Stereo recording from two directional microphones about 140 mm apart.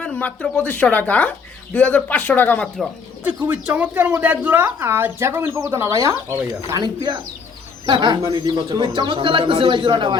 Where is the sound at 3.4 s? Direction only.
10° right (ahead or behind).